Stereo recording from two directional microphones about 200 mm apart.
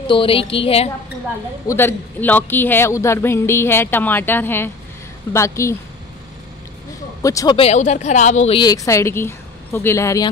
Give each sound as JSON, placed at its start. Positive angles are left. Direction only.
{"t": 0.0, "sound": "a woman's voice", "side_deg": 25}
{"t": 1.7, "sound": "speech", "side_deg": 10}
{"t": 7.2, "sound": "speech", "side_deg": 15}
{"t": 8.5, "sound": "speech", "side_deg": 20}